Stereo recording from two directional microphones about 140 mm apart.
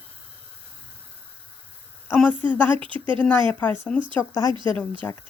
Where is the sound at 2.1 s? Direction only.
10° left (ahead or behind).